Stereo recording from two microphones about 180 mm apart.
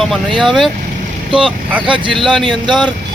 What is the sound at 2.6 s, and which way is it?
Speech, 25° right (ahead or behind).